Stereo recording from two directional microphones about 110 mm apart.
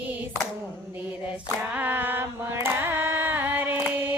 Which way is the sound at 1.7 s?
15° right (ahead or behind).